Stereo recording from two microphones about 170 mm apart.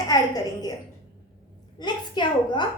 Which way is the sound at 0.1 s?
20° left (ahead or behind).